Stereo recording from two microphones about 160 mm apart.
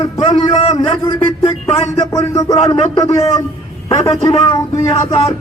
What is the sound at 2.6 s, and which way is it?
A man's voice, 35° left (ahead or behind).